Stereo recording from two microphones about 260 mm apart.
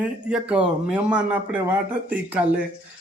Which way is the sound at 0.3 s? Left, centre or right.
Centre.